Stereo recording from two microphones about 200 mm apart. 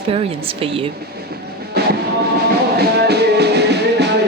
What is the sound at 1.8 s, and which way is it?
Train, 55° right (ahead or behind).